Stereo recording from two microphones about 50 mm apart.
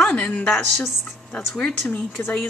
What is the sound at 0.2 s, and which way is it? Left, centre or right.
Speech, left.